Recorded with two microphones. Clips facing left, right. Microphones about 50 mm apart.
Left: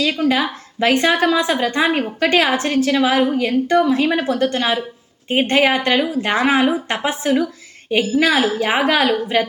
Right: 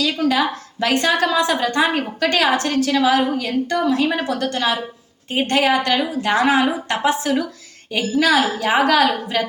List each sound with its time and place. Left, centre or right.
0.0 s a woman's voice: left